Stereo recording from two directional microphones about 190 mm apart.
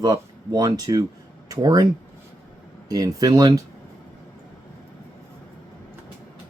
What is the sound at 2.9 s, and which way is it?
Speech, 20° right (ahead or behind).